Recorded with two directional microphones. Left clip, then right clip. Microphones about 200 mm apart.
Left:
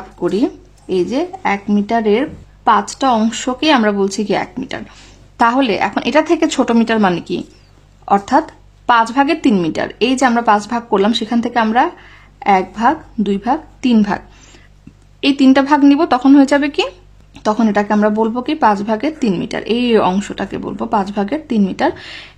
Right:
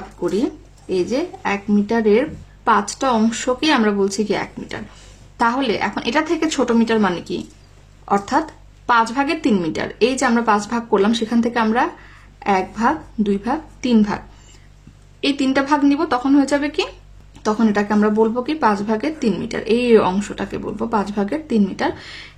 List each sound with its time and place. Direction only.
0.2 s a woman's voice: 30° left (ahead or behind)